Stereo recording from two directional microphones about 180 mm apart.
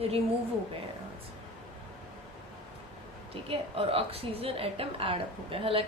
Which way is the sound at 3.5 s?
30° right (ahead or behind).